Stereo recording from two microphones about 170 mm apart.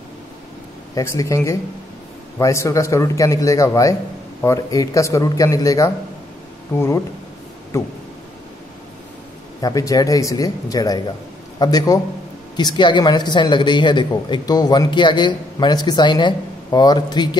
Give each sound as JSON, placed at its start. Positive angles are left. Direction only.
{"t": 0.9, "sound": "speech", "side_deg": 20}
{"t": 7.7, "sound": "a sound", "side_deg": 15}
{"t": 9.6, "sound": "speech", "side_deg": 20}